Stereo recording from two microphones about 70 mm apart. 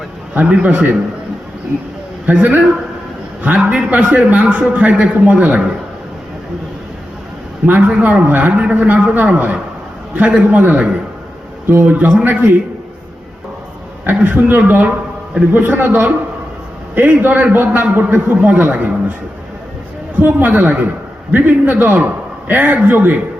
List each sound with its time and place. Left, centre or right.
0.3 s a man's voice: right
2.2 s a man's voice: right
7.7 s a man's voice: centre
10.4 s a man's voice: right
14.0 s a man's voice: right
20.1 s a man's voice: right